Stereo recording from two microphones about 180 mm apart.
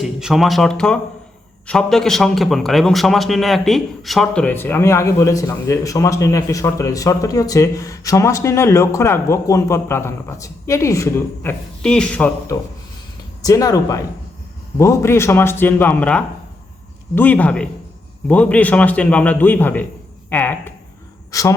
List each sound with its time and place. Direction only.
0.0 s a man's voice: centre (ahead or behind)
12.5 s a man's voice: 15° left (ahead or behind)